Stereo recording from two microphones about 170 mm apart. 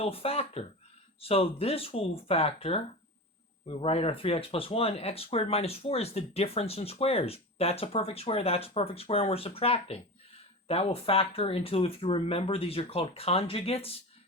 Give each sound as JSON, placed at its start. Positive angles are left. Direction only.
{"t": 0.0, "sound": "speech", "side_deg": 35}